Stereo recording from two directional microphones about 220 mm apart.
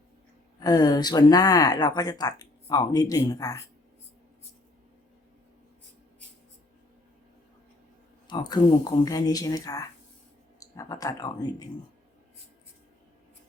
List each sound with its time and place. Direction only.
0.6 s speech: 15° left (ahead or behind)
8.3 s speech: 20° left (ahead or behind)